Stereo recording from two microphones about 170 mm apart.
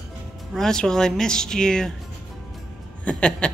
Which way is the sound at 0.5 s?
5° left (ahead or behind).